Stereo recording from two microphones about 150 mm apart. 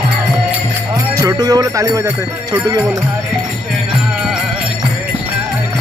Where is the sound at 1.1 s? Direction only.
25° right (ahead or behind).